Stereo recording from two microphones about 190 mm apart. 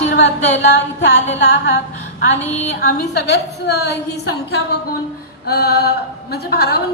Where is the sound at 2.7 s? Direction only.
60° left (ahead or behind).